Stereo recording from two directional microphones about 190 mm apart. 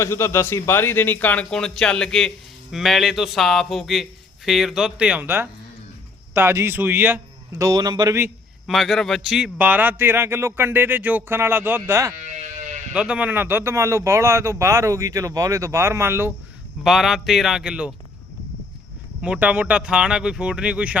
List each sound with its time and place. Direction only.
0.0 s a man's voice: 15° left (ahead or behind); by 8.3 s 15° right (ahead or behind)
8.6 s speech: centre (ahead or behind)
12.1 s sheep: 40° right (ahead or behind)
12.9 s speech: 5° right (ahead or behind)
16.8 s speech: centre (ahead or behind)
19.2 s speech: 5° right (ahead or behind)